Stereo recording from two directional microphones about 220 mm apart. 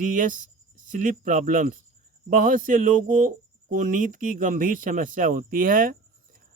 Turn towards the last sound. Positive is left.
turn(degrees=-40)  # may be behind; listen again after turning